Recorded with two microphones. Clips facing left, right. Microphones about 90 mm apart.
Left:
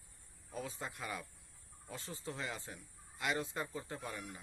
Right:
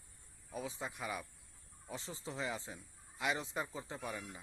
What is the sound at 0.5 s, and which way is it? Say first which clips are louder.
Speech: right 1 dB; 10° right (ahead or behind).